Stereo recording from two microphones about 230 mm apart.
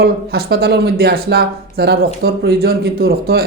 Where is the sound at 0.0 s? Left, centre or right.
Right.